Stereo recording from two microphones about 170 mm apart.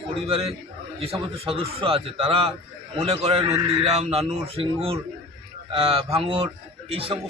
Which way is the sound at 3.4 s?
20° right (ahead or behind).